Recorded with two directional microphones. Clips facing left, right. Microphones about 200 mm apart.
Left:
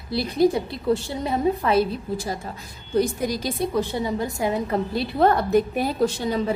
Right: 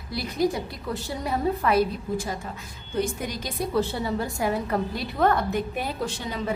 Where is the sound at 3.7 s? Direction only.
15° left (ahead or behind).